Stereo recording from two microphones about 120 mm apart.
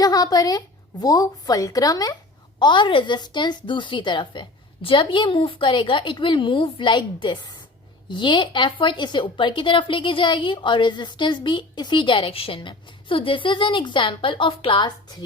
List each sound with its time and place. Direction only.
0.0 s a woman's voice: 30° left (ahead or behind)
2.6 s speech: 40° left (ahead or behind)